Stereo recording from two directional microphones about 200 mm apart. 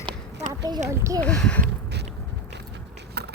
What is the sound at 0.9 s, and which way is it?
Speech, 15° right (ahead or behind).